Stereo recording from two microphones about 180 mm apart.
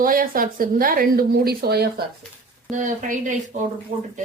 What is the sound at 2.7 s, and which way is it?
Speech, 45° right (ahead or behind).